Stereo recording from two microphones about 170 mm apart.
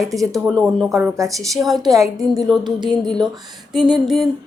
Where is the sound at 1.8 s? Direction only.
20° right (ahead or behind).